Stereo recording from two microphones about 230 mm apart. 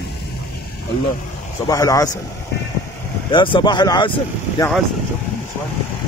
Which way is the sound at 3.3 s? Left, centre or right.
Left.